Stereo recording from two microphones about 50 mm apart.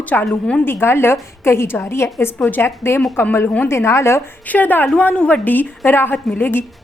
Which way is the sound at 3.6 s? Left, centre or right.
Left.